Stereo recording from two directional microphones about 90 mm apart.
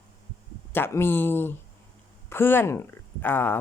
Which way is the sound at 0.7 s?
25° left (ahead or behind).